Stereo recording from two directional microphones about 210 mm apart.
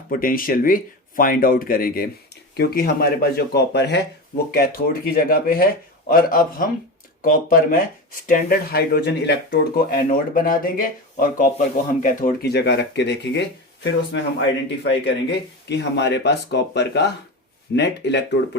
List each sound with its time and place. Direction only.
0.1 s speech: 45° left (ahead or behind)